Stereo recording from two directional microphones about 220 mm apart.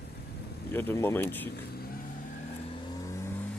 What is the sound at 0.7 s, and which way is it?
Speech, 10° left (ahead or behind).